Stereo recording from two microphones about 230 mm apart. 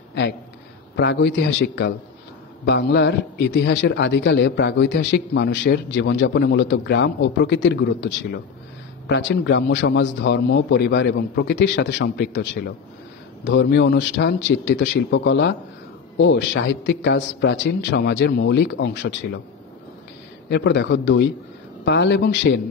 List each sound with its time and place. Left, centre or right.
0.9 s a man's voice: left
20.4 s a man's voice: left